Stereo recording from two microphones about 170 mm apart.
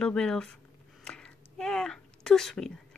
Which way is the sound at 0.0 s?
5° left (ahead or behind).